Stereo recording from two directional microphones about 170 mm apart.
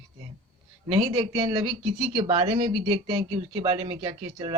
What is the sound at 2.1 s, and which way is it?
Speech, 35° right (ahead or behind).